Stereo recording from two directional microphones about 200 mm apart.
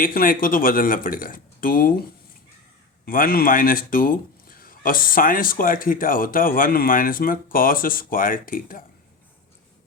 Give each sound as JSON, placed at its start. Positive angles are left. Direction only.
{"t": 0.0, "sound": "a man's voice", "side_deg": 45}
{"t": 3.1, "sound": "a man's voice", "side_deg": 45}